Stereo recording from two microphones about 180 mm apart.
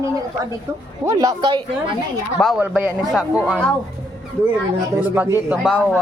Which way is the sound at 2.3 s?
Centre (ahead or behind).